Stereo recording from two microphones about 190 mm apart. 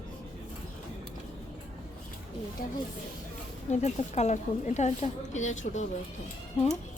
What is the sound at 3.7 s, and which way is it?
A woman's voice, 35° left (ahead or behind).